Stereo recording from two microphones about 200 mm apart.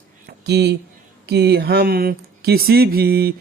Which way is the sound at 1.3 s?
55° right (ahead or behind).